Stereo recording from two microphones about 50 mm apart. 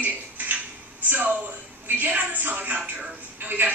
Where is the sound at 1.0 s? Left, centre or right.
Right.